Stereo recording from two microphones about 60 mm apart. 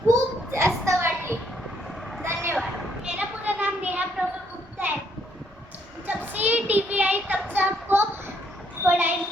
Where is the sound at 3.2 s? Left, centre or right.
Right.